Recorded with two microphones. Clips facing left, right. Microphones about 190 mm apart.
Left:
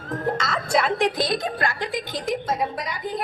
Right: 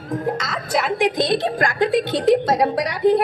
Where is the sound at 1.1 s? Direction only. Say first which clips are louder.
Right 5 dB; 25° right (ahead or behind); by 1.9 s 45° right (ahead or behind).